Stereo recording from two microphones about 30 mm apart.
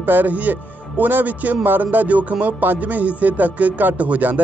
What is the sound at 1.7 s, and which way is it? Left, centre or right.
Music, right.